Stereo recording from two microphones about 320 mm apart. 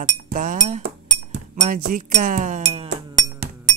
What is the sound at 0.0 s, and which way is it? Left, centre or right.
Speech, right.